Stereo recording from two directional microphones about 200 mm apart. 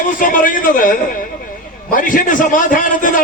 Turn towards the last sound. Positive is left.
turn(degrees=40)  # may be behind; listen again after turning